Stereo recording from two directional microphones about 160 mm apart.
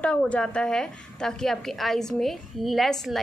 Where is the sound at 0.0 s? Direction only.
5° left (ahead or behind).